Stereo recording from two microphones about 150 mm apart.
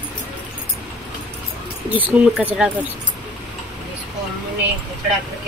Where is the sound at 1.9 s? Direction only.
10° right (ahead or behind).